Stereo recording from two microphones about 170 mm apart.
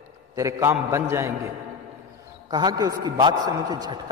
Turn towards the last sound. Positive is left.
turn(degrees=-25)  # may be behind; listen again after turning